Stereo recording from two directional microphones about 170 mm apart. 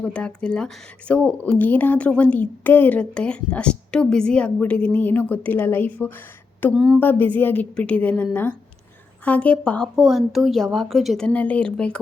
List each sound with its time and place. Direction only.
0.0 s speech: 5° left (ahead or behind)